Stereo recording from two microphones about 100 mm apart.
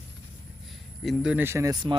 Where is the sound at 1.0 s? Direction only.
Centre (ahead or behind).